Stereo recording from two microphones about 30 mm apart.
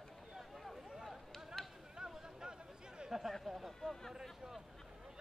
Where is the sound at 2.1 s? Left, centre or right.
Right.